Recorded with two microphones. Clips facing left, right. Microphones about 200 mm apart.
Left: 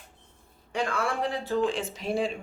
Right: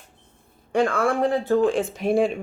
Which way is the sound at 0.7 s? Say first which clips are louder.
Right 8 dB; 50° right (ahead or behind).